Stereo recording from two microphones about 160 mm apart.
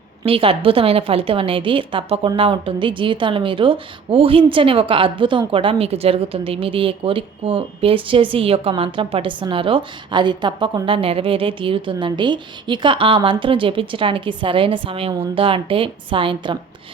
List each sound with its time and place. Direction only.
0.3 s a woman's voice: 35° right (ahead or behind)